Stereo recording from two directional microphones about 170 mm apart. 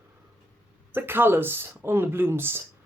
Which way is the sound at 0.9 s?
10° right (ahead or behind).